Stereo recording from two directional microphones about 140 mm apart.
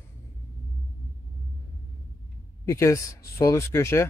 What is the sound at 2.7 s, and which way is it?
Speech, 20° left (ahead or behind).